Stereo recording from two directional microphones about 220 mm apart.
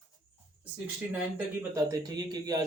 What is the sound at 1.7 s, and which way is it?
Speech, 15° right (ahead or behind).